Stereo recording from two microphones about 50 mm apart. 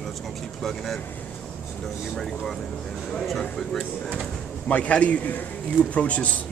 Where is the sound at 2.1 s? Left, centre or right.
Centre.